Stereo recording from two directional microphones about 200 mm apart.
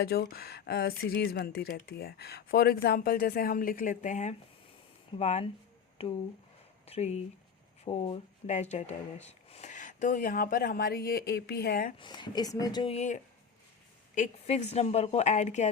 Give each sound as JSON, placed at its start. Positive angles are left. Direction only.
{"t": 0.0, "sound": "a woman's voice", "side_deg": 50}
{"t": 11.9, "sound": "a woman's voice", "side_deg": 20}